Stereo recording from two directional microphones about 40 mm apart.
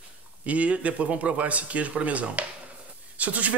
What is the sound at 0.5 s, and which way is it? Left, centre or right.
Speech, right.